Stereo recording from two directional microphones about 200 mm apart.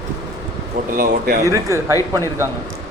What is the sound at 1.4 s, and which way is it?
Speech, 15° right (ahead or behind).